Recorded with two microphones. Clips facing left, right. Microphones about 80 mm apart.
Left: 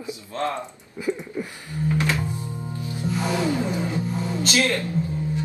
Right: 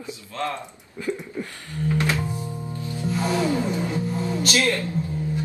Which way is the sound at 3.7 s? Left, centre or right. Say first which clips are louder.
Even; left.